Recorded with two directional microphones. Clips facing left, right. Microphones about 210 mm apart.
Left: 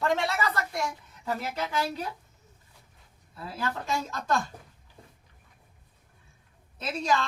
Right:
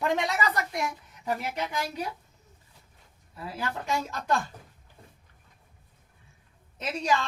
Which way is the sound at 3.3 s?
15° right (ahead or behind).